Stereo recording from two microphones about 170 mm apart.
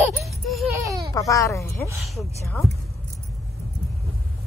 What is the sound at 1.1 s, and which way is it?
Baby cry, 20° left (ahead or behind).